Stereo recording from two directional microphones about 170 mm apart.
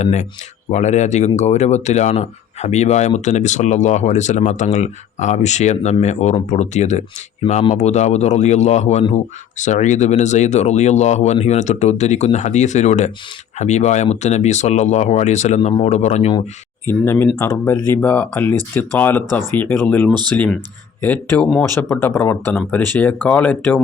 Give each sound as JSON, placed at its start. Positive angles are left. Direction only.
{"t": 0.0, "sound": "speech", "side_deg": 45}
{"t": 16.8, "sound": "speech", "side_deg": 15}